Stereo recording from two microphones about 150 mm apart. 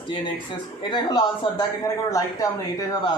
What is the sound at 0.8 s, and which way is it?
A man's voice, 30° left (ahead or behind).